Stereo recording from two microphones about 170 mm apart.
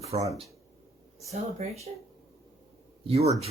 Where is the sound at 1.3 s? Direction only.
40° right (ahead or behind).